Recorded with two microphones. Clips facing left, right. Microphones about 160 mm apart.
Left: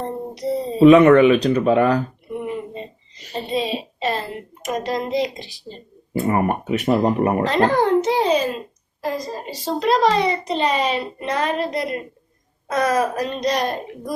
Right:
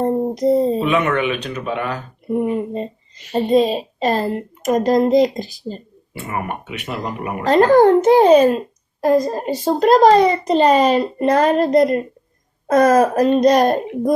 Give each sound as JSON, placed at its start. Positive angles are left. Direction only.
{"t": 0.0, "sound": "a sound", "side_deg": -45}
{"t": 0.8, "sound": "speech", "side_deg": 35}
{"t": 2.3, "sound": "a child's voice", "side_deg": -40}
{"t": 6.1, "sound": "speech", "side_deg": 40}
{"t": 7.4, "sound": "a child's voice", "side_deg": -45}